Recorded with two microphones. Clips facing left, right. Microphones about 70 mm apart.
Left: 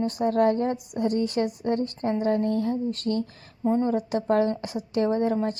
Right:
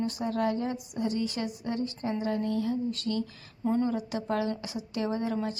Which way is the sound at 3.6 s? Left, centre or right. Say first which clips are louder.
Left 4 dB; left.